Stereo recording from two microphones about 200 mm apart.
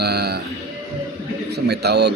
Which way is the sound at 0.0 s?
55° right (ahead or behind).